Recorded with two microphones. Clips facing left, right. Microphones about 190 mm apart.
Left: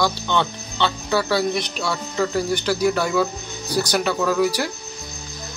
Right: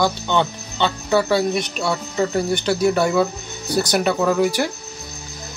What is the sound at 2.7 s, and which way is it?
Speech, 25° right (ahead or behind).